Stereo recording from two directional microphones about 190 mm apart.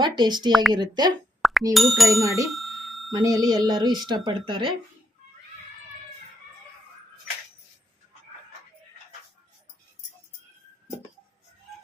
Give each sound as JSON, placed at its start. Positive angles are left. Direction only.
{"t": 0.0, "sound": "speech", "side_deg": -25}
{"t": 1.4, "sound": "plop", "side_deg": 0}
{"t": 1.7, "sound": "speech", "side_deg": 0}
{"t": 2.2, "sound": "speech", "side_deg": -15}
{"t": 2.5, "sound": "bicycle bell", "side_deg": 0}
{"t": 3.1, "sound": "speech", "side_deg": -20}